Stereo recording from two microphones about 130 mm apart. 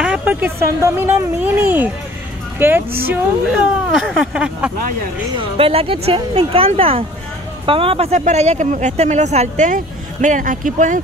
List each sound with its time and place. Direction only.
0.0 s speech: 10° right (ahead or behind)
3.5 s speech: 5° right (ahead or behind)
5.6 s speech: 50° right (ahead or behind)
8.1 s speech: 65° right (ahead or behind)
10.2 s speech: 80° right